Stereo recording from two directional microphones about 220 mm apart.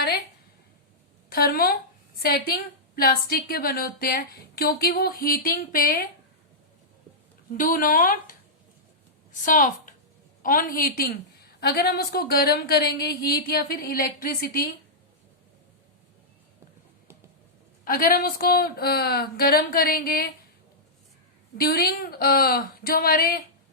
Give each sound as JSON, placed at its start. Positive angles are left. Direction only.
{"t": 1.3, "sound": "a woman's voice", "side_deg": 45}
{"t": 7.5, "sound": "speech", "side_deg": 40}
{"t": 9.4, "sound": "a woman's voice", "side_deg": 35}
{"t": 17.8, "sound": "a woman's voice", "side_deg": 40}
{"t": 21.6, "sound": "a woman's voice", "side_deg": 45}